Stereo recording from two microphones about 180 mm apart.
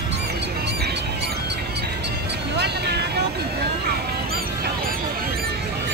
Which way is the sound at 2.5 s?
65° right (ahead or behind).